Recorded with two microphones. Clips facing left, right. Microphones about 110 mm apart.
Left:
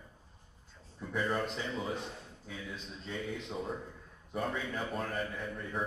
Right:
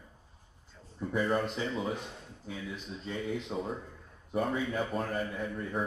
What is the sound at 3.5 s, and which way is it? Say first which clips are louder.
Speech: right 1 dB; 20° right (ahead or behind).